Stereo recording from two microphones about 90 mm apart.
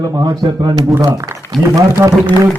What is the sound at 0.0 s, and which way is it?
Speech, 40° right (ahead or behind).